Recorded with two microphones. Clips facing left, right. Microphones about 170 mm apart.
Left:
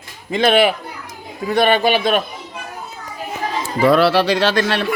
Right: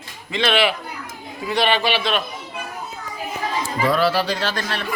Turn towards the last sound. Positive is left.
turn(degrees=80)